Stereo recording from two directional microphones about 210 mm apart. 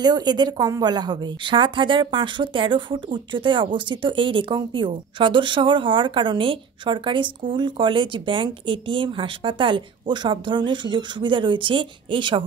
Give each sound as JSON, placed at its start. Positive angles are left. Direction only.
{"t": 0.0, "sound": "a woman's voice", "side_deg": -20}